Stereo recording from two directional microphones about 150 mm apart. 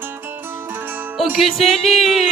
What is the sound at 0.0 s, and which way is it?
Music, 15° right (ahead or behind).